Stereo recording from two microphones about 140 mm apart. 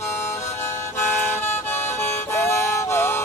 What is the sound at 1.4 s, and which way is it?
Music, 15° left (ahead or behind).